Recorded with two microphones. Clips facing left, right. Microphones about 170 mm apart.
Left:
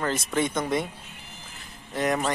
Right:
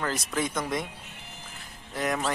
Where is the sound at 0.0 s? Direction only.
Centre (ahead or behind).